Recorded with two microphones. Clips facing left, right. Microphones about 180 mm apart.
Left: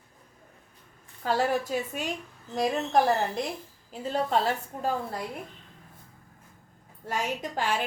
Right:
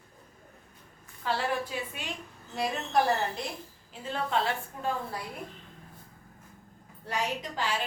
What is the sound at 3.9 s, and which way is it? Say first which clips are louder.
A woman's voice: left 4 dB; 40° left (ahead or behind).